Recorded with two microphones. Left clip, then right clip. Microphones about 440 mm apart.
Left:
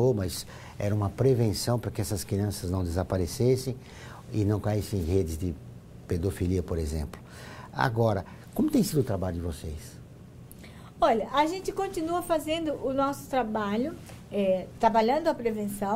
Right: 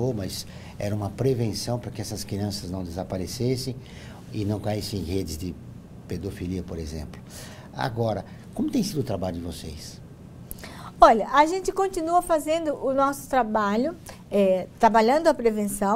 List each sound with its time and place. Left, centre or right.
0.0 s speech: left
11.0 s a woman's voice: right